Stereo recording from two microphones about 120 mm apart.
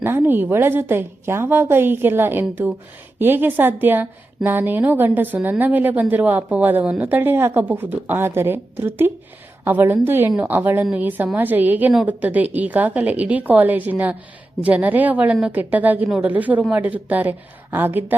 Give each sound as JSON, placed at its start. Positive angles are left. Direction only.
{"t": 0.0, "sound": "a woman's voice", "side_deg": -15}